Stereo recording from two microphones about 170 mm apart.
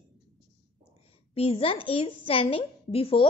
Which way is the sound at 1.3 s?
35° left (ahead or behind).